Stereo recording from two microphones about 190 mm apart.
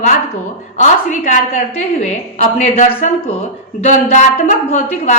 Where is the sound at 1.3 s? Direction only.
40° left (ahead or behind).